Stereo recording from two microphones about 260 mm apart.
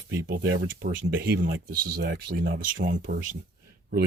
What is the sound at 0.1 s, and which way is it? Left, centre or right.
Speech, right.